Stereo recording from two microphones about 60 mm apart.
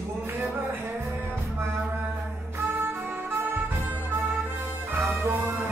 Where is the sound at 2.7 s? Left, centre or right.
Right.